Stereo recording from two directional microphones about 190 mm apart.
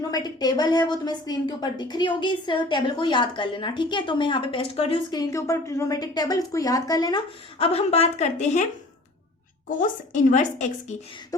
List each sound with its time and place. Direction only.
0.1 s a woman's voice: 20° left (ahead or behind)
7.6 s a woman's voice: 30° left (ahead or behind)
9.6 s a woman's voice: 45° left (ahead or behind)